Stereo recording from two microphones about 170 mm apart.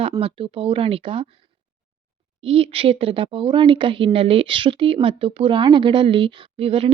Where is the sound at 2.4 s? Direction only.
35° right (ahead or behind).